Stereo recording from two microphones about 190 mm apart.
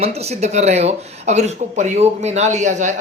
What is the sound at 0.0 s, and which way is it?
Speech, 35° right (ahead or behind).